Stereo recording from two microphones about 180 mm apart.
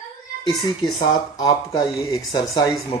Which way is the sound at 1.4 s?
20° left (ahead or behind).